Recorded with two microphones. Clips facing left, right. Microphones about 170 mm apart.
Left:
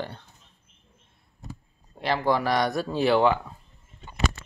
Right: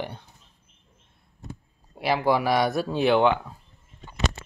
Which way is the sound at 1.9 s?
10° right (ahead or behind).